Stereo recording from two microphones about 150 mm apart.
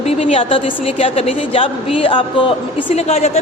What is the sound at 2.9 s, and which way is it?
Speech, 45° left (ahead or behind).